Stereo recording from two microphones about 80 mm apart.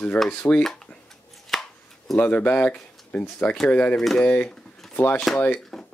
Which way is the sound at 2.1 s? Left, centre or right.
Centre.